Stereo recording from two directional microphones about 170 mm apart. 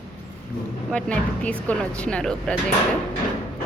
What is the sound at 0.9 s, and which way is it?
A man's voice, 5° left (ahead or behind).